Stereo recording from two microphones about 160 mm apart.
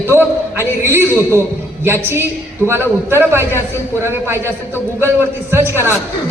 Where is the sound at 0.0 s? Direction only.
15° right (ahead or behind).